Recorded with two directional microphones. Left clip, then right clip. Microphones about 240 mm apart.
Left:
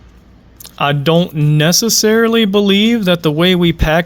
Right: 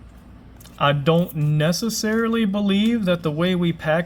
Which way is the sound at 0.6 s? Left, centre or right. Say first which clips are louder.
Left 4 dB; left.